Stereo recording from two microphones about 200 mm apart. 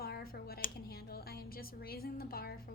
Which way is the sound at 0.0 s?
50° left (ahead or behind).